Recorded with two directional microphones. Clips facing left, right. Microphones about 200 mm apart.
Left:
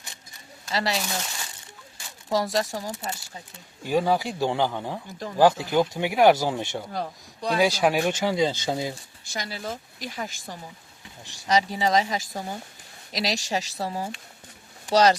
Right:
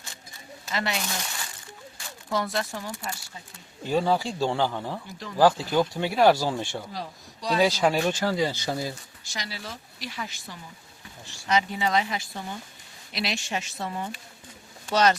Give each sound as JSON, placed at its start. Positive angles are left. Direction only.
{"t": 0.7, "sound": "speech", "side_deg": 35}
{"t": 2.3, "sound": "speech", "side_deg": 35}
{"t": 2.9, "sound": "speech", "side_deg": 20}
{"t": 6.9, "sound": "a man's voice", "side_deg": 55}
{"t": 7.6, "sound": "speech", "side_deg": 10}
{"t": 9.3, "sound": "speech", "side_deg": 50}
{"t": 11.4, "sound": "speech", "side_deg": 35}